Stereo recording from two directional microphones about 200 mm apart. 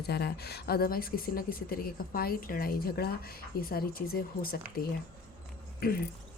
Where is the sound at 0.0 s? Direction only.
55° left (ahead or behind).